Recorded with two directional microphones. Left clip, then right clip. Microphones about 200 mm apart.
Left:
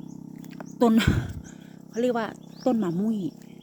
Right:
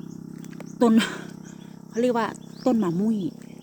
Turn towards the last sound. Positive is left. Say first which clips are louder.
# right 3 dB
turn(degrees=5)  # may be behind; listen again after turning